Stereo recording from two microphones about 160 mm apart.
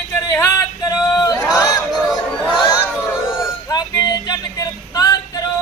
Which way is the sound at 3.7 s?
25° left (ahead or behind).